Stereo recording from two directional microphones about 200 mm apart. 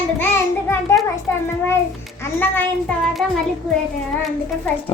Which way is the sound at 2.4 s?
10° left (ahead or behind).